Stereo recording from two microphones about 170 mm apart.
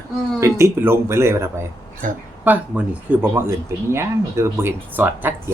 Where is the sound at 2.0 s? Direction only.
50° right (ahead or behind).